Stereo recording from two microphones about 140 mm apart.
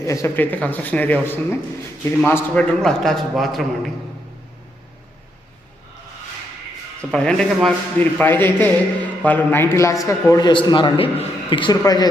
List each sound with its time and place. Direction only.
0.0 s a man's voice: 20° left (ahead or behind); by 3.9 s centre (ahead or behind)
7.1 s a man's voice: 5° left (ahead or behind); by 12.0 s 25° left (ahead or behind)